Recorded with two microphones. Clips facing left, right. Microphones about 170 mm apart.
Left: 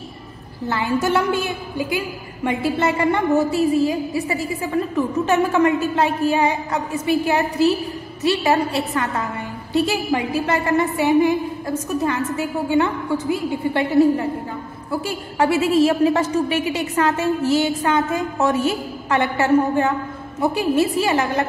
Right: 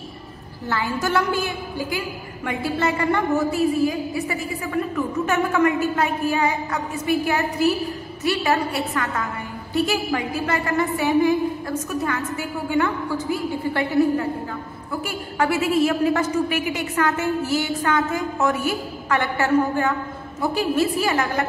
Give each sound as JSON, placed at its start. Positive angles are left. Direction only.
{"t": 0.7, "sound": "a woman's voice", "side_deg": 20}